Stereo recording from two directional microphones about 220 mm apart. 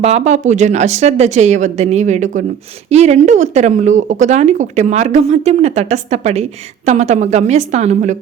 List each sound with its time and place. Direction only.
0.0 s speech: 30° right (ahead or behind)